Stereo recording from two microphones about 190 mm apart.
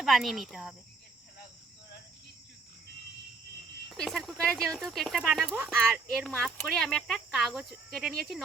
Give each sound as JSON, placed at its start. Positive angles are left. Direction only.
{"t": 0.0, "sound": "speech", "side_deg": 0}
{"t": 3.9, "sound": "speech", "side_deg": 0}